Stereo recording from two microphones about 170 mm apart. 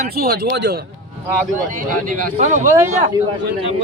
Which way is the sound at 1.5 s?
50° right (ahead or behind).